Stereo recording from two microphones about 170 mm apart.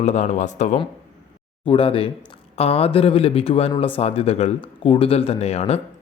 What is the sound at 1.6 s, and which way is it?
Speech, 30° left (ahead or behind).